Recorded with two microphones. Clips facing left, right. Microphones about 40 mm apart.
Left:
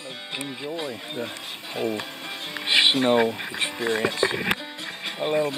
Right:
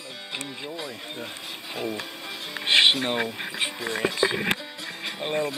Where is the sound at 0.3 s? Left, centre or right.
Centre.